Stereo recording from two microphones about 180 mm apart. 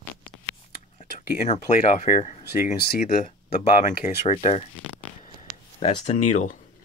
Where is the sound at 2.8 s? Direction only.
50° left (ahead or behind).